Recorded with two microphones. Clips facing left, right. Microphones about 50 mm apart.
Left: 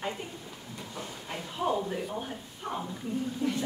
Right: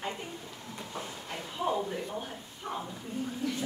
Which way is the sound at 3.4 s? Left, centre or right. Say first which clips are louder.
Left 4 dB; left.